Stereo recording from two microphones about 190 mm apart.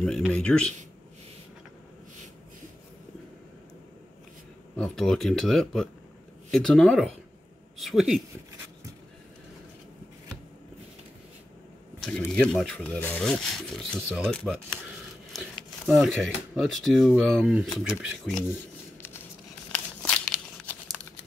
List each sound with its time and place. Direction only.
0.0 s speech: centre (ahead or behind)
4.7 s speech: 5° left (ahead or behind)
12.0 s speech: 5° left (ahead or behind)
15.9 s speech: centre (ahead or behind)
19.7 s crumpling: 5° left (ahead or behind)